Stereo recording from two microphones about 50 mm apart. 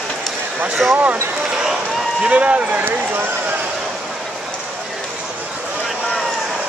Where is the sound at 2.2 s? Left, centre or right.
Right.